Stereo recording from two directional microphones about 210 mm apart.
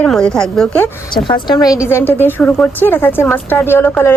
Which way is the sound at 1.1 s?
20° left (ahead or behind).